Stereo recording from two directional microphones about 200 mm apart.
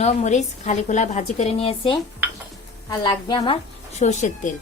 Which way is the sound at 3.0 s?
20° left (ahead or behind).